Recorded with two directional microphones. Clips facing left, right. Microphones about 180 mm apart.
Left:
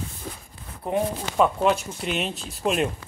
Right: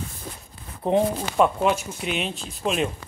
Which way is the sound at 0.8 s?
20° right (ahead or behind).